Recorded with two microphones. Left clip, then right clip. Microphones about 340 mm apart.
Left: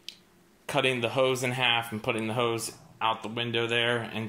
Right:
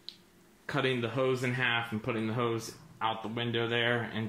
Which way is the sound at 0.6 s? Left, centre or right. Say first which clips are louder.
Left 5 dB; centre.